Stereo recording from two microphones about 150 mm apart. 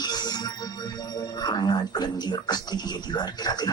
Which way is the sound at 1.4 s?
30° left (ahead or behind).